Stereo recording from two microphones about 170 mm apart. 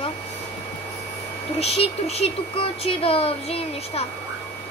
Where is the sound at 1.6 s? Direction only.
35° left (ahead or behind).